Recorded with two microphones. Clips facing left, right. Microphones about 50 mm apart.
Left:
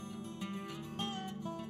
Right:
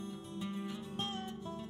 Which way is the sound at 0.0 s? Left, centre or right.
Left.